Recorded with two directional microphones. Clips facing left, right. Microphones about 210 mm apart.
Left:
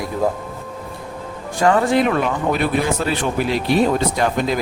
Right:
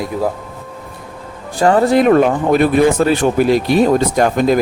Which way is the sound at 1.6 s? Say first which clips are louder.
Right 4 dB; 35° right (ahead or behind).